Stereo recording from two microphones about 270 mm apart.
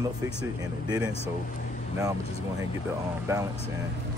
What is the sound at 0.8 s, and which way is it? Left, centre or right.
Speech, centre.